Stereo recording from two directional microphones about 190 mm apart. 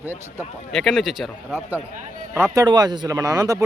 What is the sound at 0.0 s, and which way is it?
Speech, 10° right (ahead or behind).